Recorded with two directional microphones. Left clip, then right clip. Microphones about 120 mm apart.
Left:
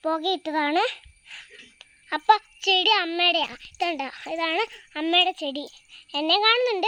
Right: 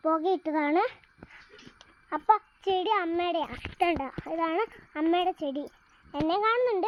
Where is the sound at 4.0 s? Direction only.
25° left (ahead or behind).